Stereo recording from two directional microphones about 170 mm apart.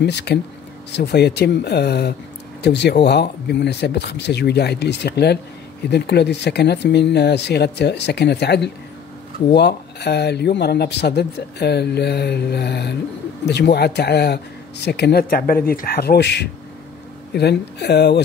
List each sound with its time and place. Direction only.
0.0 s speech: 80° left